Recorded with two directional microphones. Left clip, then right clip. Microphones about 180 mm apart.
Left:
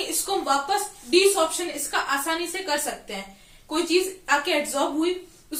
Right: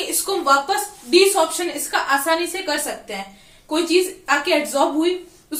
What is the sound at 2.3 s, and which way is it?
Speech, 5° right (ahead or behind).